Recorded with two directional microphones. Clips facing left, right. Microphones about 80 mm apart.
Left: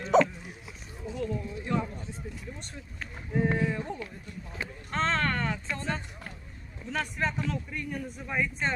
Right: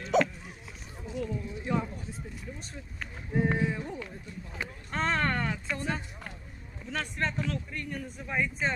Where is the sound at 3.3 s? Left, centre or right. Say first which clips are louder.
Left 1 dB; centre.